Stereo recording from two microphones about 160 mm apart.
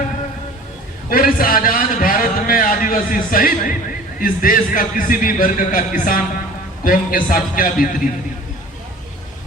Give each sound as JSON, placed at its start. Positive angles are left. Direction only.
{"t": 1.1, "sound": "a man's voice", "side_deg": 65}